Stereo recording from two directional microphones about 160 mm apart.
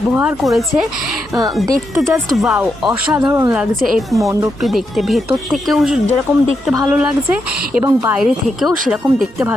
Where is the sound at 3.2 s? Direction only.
20° right (ahead or behind).